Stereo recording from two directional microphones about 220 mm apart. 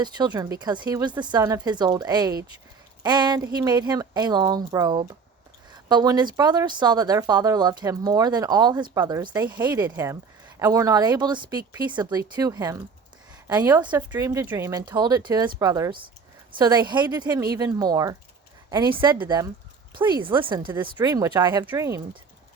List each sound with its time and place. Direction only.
0.0 s a woman's voice: 20° right (ahead or behind)
19.2 s a woman's voice: 20° right (ahead or behind)